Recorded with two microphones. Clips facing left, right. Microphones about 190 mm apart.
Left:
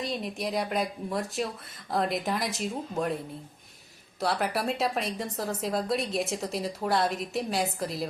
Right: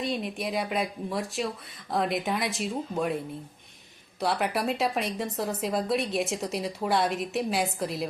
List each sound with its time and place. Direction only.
0.0 s speech: centre (ahead or behind)
4.2 s speech: centre (ahead or behind)